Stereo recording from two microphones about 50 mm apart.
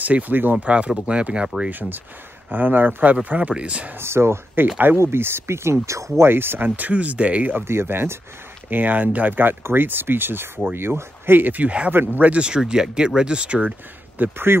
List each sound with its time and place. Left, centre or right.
0.0 s speech: right
0.7 s speech: right
1.7 s speech: right
4.0 s speech: right
6.2 s speech: right
6.9 s speech: right
7.6 s speech: right
8.6 s speech: right
12.2 s speech: right
14.1 s speech: right